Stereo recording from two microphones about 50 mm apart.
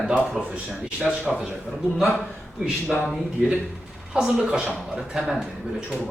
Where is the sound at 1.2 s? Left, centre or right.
Centre.